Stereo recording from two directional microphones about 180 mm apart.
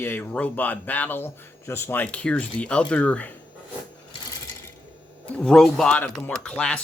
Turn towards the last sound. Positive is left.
turn(degrees=5)  # may be behind; listen again after turning